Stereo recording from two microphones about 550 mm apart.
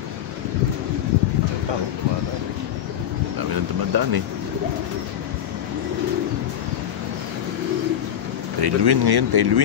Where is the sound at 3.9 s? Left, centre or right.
Right.